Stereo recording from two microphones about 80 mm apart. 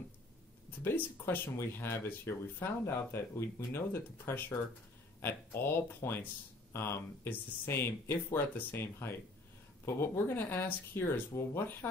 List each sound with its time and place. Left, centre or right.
0.7 s speech: left